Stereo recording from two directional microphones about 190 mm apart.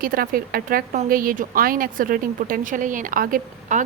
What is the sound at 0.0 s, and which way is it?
A woman's voice, 50° right (ahead or behind).